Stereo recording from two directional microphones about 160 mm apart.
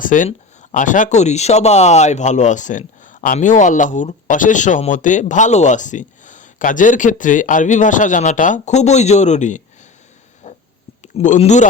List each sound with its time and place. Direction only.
0.0 s speech: 55° left (ahead or behind)
10.4 s a sound: 45° left (ahead or behind)
11.0 s speech: 50° left (ahead or behind)